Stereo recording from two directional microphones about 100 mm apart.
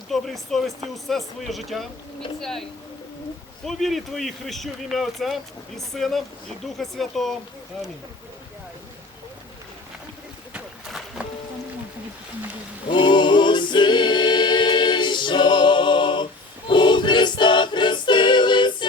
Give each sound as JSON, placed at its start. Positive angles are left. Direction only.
{"t": 0.1, "sound": "speech", "side_deg": 0}
{"t": 3.7, "sound": "speech", "side_deg": 0}
{"t": 12.9, "sound": "a capella", "side_deg": 55}
{"t": 16.6, "sound": "choir", "side_deg": 50}